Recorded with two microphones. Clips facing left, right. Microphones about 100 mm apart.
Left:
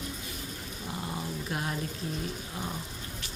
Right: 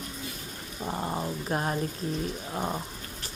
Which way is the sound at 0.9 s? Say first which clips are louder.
Right 5 dB; 45° right (ahead or behind).